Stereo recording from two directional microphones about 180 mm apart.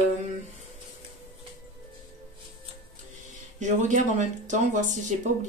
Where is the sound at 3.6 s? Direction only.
45° right (ahead or behind).